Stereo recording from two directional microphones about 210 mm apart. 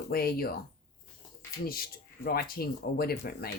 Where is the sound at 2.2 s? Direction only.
45° left (ahead or behind).